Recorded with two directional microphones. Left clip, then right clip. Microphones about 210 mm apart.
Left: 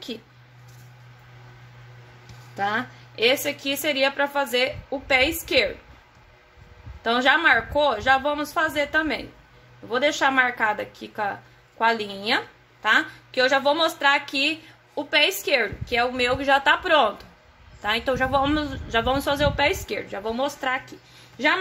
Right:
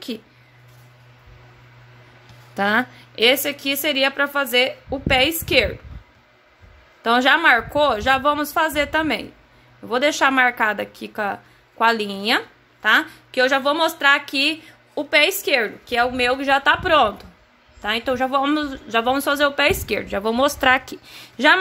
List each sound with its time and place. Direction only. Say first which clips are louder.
2.5 s speech: right 6 dB; 35° right (ahead or behind)
7.0 s speech: right 4 dB; 30° right (ahead or behind)